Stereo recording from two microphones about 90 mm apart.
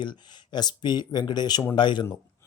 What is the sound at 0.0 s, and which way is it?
Speech, 55° left (ahead or behind).